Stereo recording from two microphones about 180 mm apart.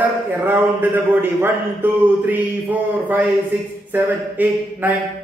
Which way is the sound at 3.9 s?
10° right (ahead or behind).